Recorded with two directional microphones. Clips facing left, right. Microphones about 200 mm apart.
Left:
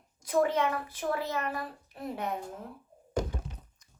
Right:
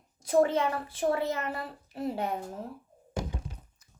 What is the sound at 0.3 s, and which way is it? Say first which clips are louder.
A woman's voice: right 2 dB; 30° right (ahead or behind).